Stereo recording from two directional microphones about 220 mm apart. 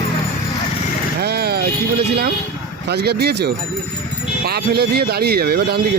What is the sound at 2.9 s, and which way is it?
Speech, 50° right (ahead or behind).